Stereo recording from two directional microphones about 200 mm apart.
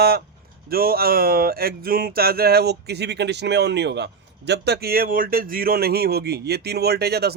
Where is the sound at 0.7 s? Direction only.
50° right (ahead or behind).